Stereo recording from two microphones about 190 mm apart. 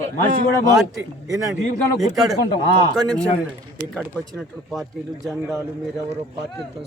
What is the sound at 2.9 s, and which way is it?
Speech, 5° left (ahead or behind).